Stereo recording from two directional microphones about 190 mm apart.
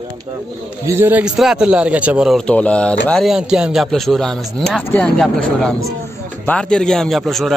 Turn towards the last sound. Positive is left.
turn(degrees=0)  # may be behind; listen again after turning